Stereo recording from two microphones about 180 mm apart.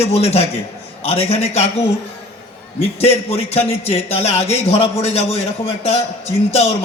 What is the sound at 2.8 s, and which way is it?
A man's voice, 35° left (ahead or behind).